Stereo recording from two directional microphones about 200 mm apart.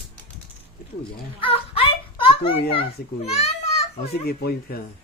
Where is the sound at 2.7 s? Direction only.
30° left (ahead or behind).